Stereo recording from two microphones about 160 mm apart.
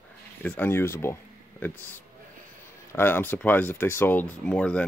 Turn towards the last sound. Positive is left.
turn(degrees=10)  # may be behind; listen again after turning